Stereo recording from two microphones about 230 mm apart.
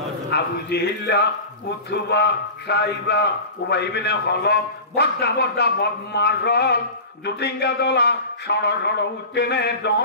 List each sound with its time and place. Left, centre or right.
0.3 s a man's voice: left